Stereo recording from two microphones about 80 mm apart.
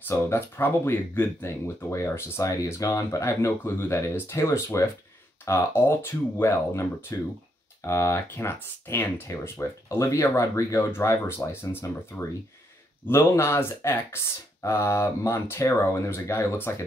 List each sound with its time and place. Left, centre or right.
0.1 s speech: left